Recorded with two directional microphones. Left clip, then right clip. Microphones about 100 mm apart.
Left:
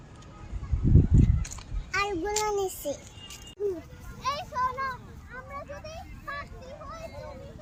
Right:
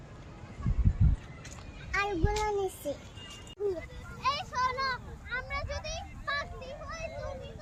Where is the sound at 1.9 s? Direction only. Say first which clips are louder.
Left 3 dB; 65° left (ahead or behind).